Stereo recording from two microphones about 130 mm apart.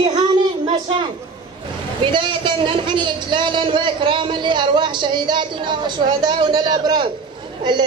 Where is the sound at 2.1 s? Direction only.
35° right (ahead or behind).